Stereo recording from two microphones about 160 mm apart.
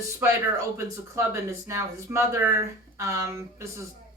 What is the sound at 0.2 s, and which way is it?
Speech, 15° right (ahead or behind).